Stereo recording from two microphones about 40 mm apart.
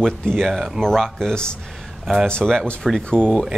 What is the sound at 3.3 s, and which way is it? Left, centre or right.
Speech, centre.